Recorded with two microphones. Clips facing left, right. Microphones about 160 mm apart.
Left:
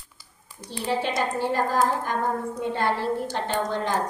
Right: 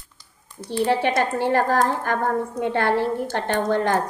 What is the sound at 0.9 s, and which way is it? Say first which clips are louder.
A woman's voice: right 3 dB; 65° right (ahead or behind).